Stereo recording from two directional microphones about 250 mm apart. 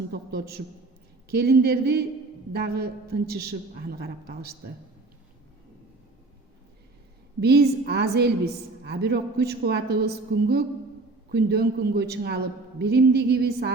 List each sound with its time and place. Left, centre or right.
0.1 s a man's voice: right
7.4 s a man's voice: right